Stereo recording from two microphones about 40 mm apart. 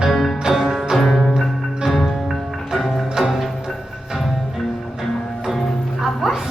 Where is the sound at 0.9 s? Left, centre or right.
Centre.